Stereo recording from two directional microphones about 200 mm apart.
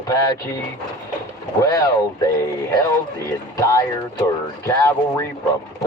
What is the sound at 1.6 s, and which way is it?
Speech, 15° left (ahead or behind).